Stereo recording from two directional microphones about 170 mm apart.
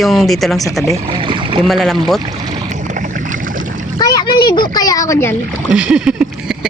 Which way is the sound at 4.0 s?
20° left (ahead or behind).